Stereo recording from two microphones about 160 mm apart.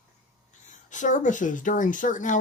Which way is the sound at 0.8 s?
50° left (ahead or behind).